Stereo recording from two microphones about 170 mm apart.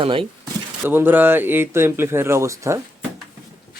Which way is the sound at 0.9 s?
10° right (ahead or behind).